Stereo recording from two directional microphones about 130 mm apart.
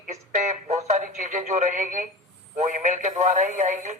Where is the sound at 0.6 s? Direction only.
55° right (ahead or behind).